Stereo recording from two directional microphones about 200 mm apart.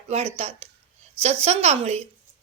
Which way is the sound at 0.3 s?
30° right (ahead or behind).